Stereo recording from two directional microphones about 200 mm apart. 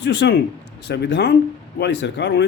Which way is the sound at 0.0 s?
60° left (ahead or behind).